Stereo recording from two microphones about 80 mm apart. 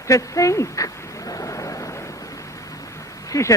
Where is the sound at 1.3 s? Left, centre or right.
Left.